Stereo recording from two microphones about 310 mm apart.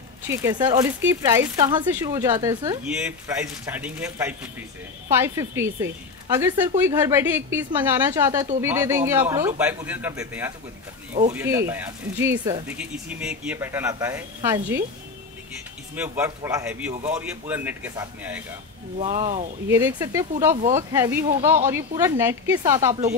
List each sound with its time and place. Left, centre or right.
0.3 s speech: centre
16.0 s a man's voice: centre
18.9 s speech: right
19.7 s speech: centre